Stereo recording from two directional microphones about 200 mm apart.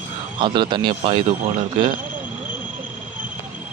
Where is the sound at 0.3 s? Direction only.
25° right (ahead or behind).